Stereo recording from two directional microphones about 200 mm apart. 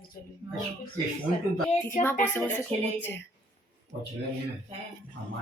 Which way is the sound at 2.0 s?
10° left (ahead or behind).